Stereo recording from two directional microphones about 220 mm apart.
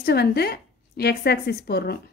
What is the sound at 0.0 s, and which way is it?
Speech, 45° left (ahead or behind).